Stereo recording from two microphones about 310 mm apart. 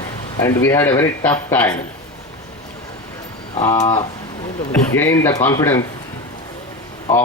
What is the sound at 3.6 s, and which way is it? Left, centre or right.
Speech, centre.